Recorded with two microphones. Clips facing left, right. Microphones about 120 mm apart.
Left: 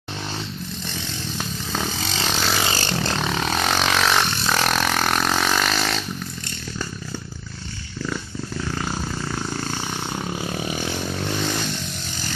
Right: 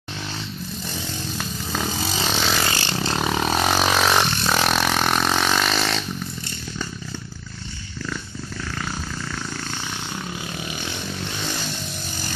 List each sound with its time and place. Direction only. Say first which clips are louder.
1.4 s chainsaw: left 1 dB; centre (ahead or behind)
2.0 s vehicle: right 1 dB; 10° right (ahead or behind)
2.3 s vehicle: even; 5° left (ahead or behind)
2.7 s vehicle: left 1 dB; 45° left (ahead or behind)
3.2 s a sound: right 2 dB; 10° right (ahead or behind)